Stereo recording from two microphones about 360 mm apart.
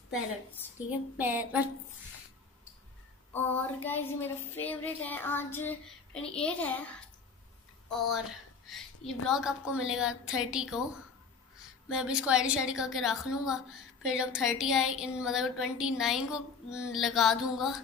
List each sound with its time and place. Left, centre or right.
0.8 s speech: centre
3.3 s speech: centre
8.1 s speech: centre
11.9 s speech: centre